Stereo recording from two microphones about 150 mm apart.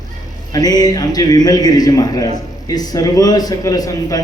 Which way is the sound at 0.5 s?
25° left (ahead or behind).